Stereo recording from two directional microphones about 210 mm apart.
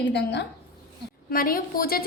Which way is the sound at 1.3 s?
45° left (ahead or behind).